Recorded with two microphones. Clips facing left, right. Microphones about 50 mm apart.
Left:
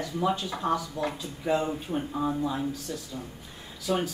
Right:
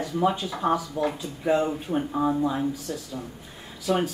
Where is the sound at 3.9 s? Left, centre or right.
Right.